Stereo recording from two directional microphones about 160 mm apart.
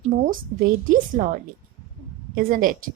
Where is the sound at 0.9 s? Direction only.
55° right (ahead or behind).